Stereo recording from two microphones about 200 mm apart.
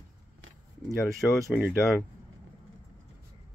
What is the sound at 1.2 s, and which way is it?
Speech, 5° left (ahead or behind).